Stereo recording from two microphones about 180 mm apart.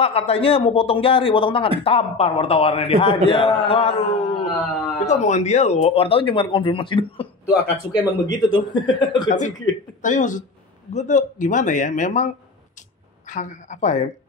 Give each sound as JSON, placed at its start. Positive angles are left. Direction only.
{"t": 0.0, "sound": "speech", "side_deg": 35}
{"t": 3.3, "sound": "mantra", "side_deg": 30}
{"t": 5.0, "sound": "speech", "side_deg": 40}
{"t": 8.4, "sound": "mantra", "side_deg": 25}
{"t": 10.0, "sound": "speech", "side_deg": 45}
{"t": 13.3, "sound": "speech", "side_deg": 45}